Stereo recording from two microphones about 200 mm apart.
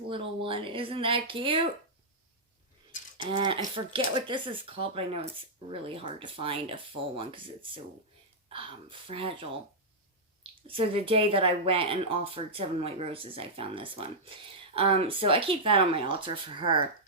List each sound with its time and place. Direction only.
0.1 s speech: 25° right (ahead or behind)
3.2 s speech: 25° right (ahead or behind)
10.7 s speech: 25° right (ahead or behind)